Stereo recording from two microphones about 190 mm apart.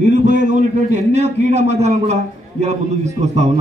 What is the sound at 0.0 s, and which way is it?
A man's voice, 40° right (ahead or behind).